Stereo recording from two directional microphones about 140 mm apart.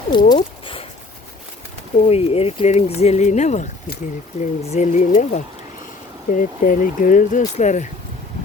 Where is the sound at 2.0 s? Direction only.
45° left (ahead or behind).